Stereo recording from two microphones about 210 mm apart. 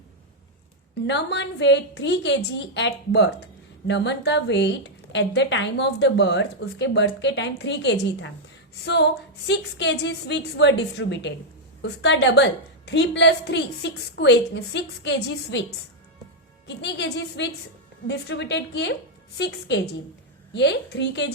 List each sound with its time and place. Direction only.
1.0 s a woman's voice: 55° left (ahead or behind)
16.6 s a woman's voice: 55° left (ahead or behind)